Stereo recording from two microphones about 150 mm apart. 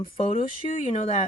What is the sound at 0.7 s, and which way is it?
Speech, 55° left (ahead or behind).